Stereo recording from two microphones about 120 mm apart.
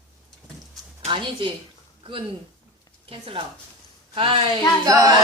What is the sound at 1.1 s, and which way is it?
Speech, 45° right (ahead or behind).